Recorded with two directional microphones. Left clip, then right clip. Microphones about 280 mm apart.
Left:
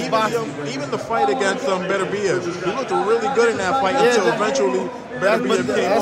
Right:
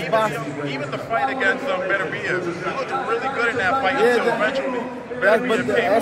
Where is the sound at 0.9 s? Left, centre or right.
Centre.